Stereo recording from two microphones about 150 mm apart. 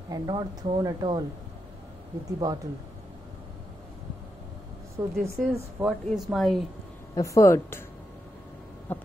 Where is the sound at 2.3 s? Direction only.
25° right (ahead or behind).